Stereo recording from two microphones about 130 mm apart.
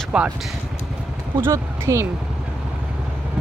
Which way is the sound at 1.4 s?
20° right (ahead or behind).